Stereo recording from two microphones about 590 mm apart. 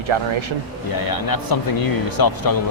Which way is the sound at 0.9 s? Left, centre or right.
Left.